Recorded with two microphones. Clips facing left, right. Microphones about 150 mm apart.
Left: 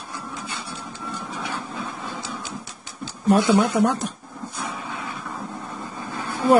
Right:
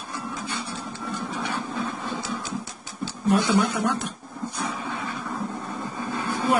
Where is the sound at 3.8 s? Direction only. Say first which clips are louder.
Left 4 dB; 40° left (ahead or behind).